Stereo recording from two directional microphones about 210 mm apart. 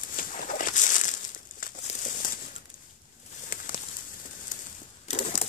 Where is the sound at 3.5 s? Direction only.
40° left (ahead or behind).